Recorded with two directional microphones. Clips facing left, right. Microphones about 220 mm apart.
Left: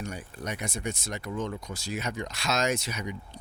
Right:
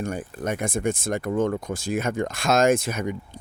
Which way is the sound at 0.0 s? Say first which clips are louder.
Right 8 dB; 50° right (ahead or behind).